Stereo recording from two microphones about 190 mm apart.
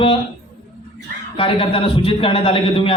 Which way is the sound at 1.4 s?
30° left (ahead or behind).